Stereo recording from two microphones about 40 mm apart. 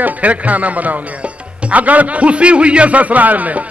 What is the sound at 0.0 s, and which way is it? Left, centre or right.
Speech, right.